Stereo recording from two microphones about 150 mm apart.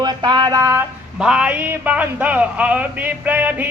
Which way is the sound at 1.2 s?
5° right (ahead or behind).